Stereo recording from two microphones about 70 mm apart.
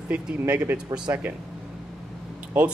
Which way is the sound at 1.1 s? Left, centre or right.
Right.